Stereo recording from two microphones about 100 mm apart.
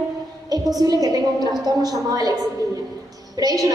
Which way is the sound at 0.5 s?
40° right (ahead or behind).